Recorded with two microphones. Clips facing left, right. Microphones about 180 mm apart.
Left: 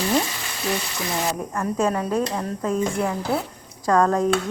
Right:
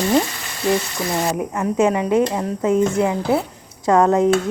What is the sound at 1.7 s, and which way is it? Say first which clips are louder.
Speech: right 6 dB; 15° right (ahead or behind).